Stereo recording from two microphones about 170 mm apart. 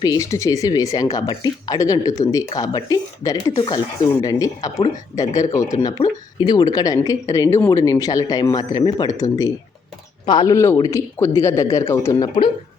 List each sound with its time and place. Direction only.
0.0 s speech: 20° left (ahead or behind)
6.0 s speech: 40° left (ahead or behind)
6.4 s speech: 25° left (ahead or behind)